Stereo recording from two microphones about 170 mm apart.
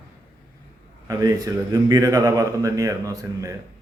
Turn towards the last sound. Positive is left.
turn(degrees=-20)  # may be behind; listen again after turning